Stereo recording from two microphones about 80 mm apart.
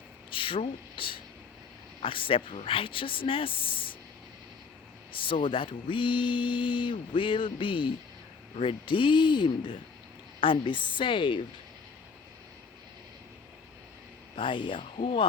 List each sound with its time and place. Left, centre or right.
0.3 s speech: left
5.2 s speech: left
10.4 s speech: left
14.3 s speech: left